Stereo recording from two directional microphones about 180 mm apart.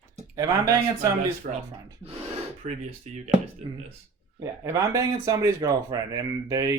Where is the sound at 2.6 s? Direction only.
45° right (ahead or behind).